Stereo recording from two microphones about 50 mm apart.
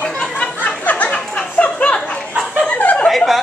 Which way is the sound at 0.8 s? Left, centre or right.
Left.